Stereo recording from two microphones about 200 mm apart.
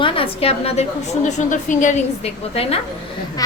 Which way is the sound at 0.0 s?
30° left (ahead or behind).